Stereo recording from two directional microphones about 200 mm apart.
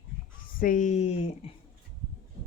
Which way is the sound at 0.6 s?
40° left (ahead or behind).